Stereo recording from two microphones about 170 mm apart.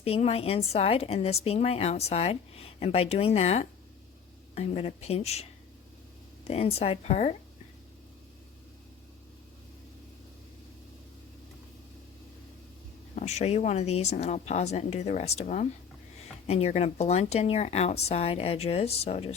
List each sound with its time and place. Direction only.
0.0 s a woman's voice: 35° left (ahead or behind)
6.5 s a woman's voice: 35° left (ahead or behind)
13.1 s a woman's voice: 40° left (ahead or behind)